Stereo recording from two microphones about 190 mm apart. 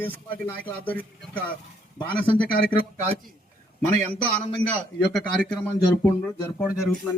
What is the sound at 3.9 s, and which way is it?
A man's voice, 10° left (ahead or behind).